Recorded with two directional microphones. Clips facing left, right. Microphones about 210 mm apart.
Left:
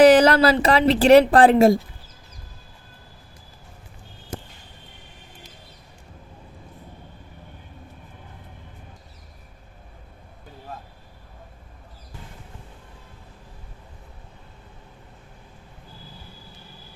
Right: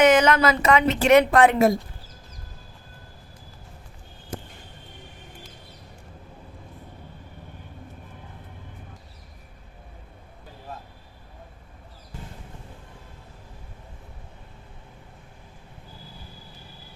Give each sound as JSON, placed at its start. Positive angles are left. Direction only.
{"t": 0.0, "sound": "a woman's voice", "side_deg": 35}